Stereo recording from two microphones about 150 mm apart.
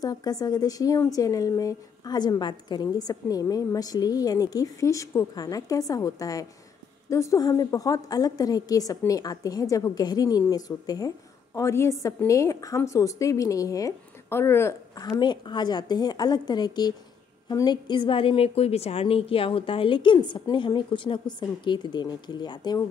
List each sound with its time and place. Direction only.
0.0 s a woman's voice: 25° left (ahead or behind)